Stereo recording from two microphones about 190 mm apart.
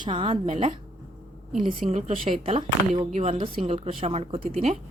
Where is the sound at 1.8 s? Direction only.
35° right (ahead or behind).